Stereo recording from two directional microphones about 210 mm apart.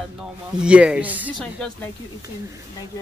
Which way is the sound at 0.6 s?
5° right (ahead or behind).